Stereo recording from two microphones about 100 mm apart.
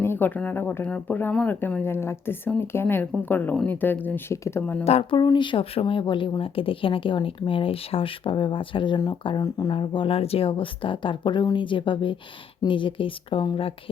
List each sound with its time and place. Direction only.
0.0 s speech: 20° left (ahead or behind)
4.6 s speech: 15° left (ahead or behind)
5.1 s speech: 50° left (ahead or behind)
9.7 s speech: 55° left (ahead or behind)